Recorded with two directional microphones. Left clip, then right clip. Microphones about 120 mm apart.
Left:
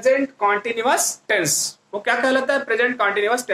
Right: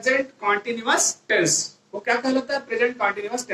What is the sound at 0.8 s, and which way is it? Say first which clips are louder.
Speech: left 1 dB; 85° left.